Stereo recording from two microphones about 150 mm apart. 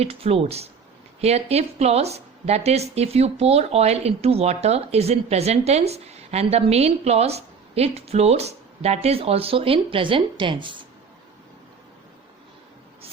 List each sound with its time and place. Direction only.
0.0 s a woman's voice: 40° right (ahead or behind)